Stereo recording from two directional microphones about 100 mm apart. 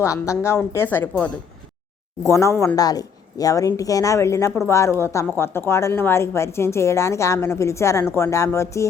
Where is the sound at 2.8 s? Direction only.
40° left (ahead or behind).